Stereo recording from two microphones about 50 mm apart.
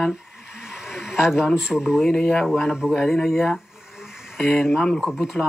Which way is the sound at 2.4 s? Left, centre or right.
Centre.